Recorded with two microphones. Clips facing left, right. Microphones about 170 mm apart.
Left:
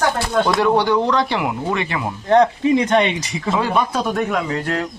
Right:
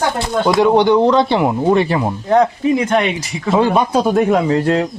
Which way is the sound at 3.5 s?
30° right (ahead or behind).